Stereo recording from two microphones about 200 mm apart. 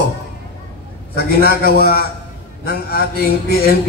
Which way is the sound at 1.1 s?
50° left (ahead or behind).